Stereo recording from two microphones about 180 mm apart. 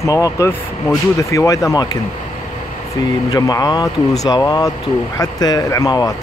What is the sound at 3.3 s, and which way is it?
Speech, 20° left (ahead or behind).